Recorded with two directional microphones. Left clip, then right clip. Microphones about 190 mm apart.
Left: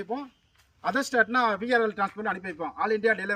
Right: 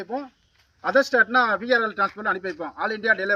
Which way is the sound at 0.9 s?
40° left (ahead or behind).